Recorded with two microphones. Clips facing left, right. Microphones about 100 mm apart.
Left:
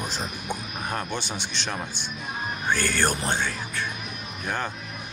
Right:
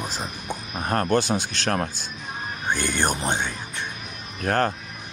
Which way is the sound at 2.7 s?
20° right (ahead or behind).